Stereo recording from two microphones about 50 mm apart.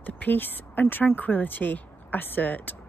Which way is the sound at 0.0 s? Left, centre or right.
Left.